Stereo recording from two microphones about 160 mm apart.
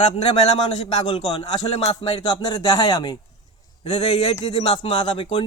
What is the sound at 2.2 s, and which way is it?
Speech, 25° left (ahead or behind).